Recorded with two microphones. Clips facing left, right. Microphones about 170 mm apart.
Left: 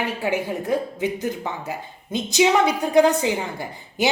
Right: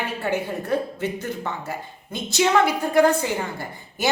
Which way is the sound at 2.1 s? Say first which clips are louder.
Left 2 dB; 15° left (ahead or behind).